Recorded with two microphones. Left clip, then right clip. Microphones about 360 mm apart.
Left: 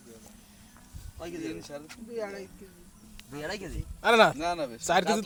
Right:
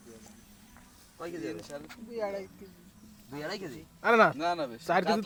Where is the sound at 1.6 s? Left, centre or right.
Centre.